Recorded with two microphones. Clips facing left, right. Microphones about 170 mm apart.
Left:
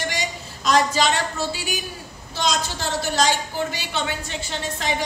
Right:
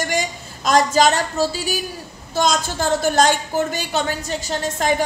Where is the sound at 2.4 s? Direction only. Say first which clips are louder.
Right 5 dB; 50° right (ahead or behind).